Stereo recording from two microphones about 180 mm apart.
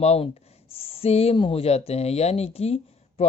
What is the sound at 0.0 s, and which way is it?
Speech, 35° left (ahead or behind).